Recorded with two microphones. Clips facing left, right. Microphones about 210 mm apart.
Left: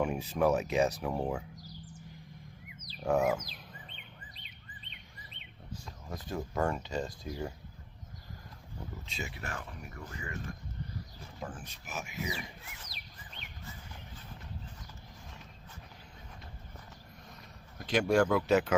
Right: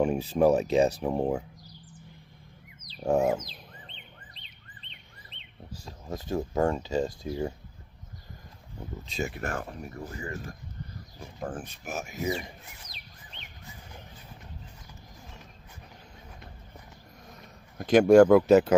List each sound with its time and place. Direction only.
0.0 s speech: 30° right (ahead or behind)
3.0 s speech: 30° right (ahead or behind)
5.8 s speech: 25° right (ahead or behind)
9.0 s speech: 45° right (ahead or behind)
11.3 s speech: 50° right (ahead or behind)
17.7 s speech: 50° right (ahead or behind)